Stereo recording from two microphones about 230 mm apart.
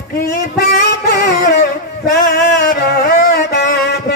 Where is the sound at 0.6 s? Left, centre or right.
Left.